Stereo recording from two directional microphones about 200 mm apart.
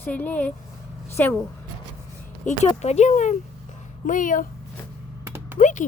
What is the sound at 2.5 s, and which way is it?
Speech, 35° left (ahead or behind).